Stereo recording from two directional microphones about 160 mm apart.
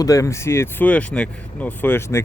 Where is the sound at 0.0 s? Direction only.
20° left (ahead or behind).